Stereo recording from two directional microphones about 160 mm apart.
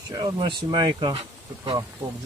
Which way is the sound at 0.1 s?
25° right (ahead or behind).